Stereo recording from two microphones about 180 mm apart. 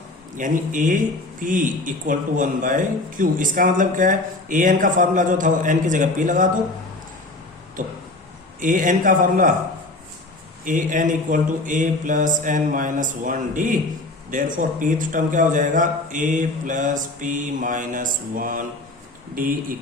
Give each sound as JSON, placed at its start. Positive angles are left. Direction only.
{"t": 0.3, "sound": "speech", "side_deg": -45}
{"t": 8.6, "sound": "speech", "side_deg": -45}
{"t": 10.7, "sound": "speech", "side_deg": -45}